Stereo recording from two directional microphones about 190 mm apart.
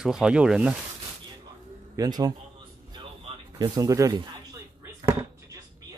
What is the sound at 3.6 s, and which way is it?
Speech, 15° right (ahead or behind).